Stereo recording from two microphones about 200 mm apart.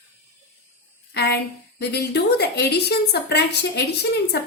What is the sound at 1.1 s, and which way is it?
A woman's voice, 55° left (ahead or behind).